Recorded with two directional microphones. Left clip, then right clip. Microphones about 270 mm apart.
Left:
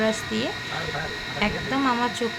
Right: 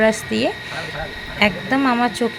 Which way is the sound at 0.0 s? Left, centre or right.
Centre.